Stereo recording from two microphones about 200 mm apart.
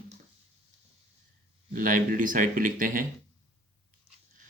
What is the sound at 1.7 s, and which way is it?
Speech, 45° right (ahead or behind).